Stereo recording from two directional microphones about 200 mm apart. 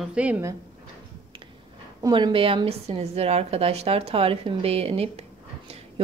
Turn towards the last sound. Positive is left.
turn(degrees=-30)  # may be behind; listen again after turning